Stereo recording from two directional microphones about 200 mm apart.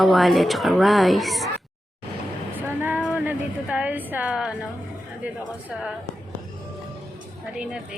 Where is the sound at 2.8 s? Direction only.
10° right (ahead or behind).